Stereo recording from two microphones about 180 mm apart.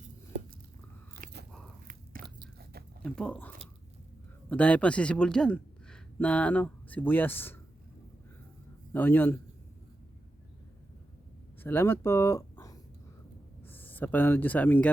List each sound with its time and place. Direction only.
2.2 s biting: 50° right (ahead or behind)
3.0 s a man's voice: 5° left (ahead or behind)
8.9 s a man's voice: 10° left (ahead or behind)
11.6 s speech: 10° left (ahead or behind)